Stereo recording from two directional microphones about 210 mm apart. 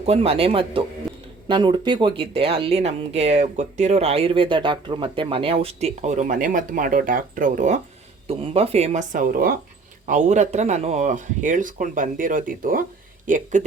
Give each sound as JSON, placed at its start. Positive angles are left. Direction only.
{"t": 0.0, "sound": "speech", "side_deg": -30}